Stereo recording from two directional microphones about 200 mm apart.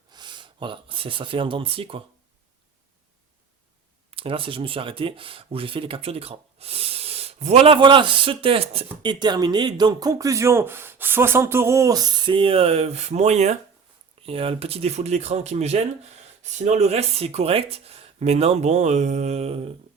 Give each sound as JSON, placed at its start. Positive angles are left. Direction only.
{"t": 0.1, "sound": "speech", "side_deg": -20}
{"t": 4.1, "sound": "speech", "side_deg": -25}